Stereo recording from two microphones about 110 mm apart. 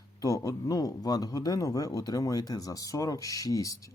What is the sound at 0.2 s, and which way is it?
Speech, 35° left (ahead or behind).